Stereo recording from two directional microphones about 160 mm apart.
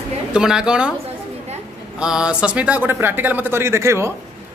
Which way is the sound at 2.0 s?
5° right (ahead or behind).